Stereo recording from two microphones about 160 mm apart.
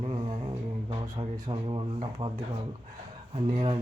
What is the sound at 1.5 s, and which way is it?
Mantra, 30° right (ahead or behind).